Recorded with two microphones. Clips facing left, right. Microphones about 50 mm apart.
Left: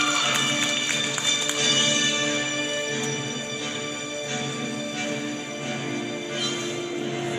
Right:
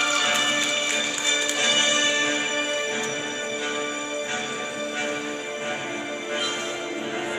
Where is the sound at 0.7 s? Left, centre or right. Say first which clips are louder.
Right 1 dB; centre.